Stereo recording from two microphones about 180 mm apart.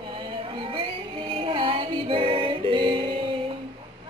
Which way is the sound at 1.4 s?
30° right (ahead or behind).